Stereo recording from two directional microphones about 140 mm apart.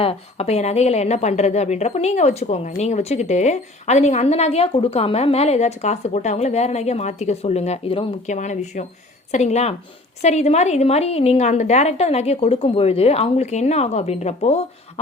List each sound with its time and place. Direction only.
0.0 s a woman's voice: 45° left (ahead or behind)
8.4 s a woman's voice: 55° left (ahead or behind)